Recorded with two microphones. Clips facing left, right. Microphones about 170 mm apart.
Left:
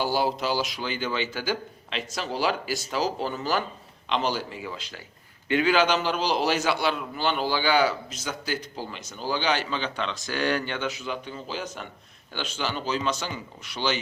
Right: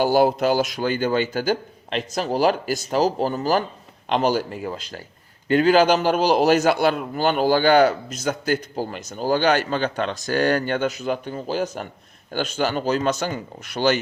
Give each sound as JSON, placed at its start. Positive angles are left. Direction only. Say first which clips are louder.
{"t": 0.0, "sound": "a man's voice", "louder": "right 8 dB", "side_deg": -50}